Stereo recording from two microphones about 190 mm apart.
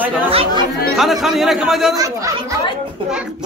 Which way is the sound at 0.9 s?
Centre (ahead or behind).